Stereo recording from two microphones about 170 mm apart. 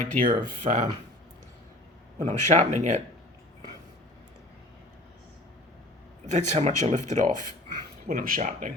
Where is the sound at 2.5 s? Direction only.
40° right (ahead or behind).